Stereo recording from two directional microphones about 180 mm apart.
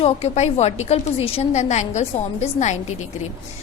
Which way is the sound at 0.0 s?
35° left (ahead or behind).